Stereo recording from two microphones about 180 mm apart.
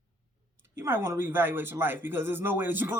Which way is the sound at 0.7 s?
15° right (ahead or behind).